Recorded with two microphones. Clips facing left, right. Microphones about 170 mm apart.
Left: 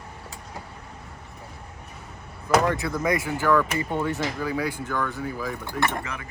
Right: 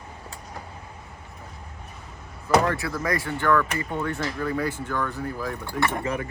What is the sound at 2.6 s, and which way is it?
Speech, 20° left (ahead or behind).